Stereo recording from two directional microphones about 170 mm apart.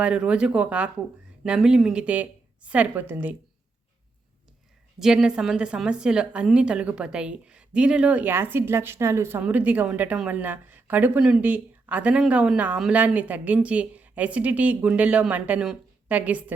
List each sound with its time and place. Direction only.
0.0 s a woman's voice: 5° right (ahead or behind)
4.9 s a woman's voice: 5° right (ahead or behind)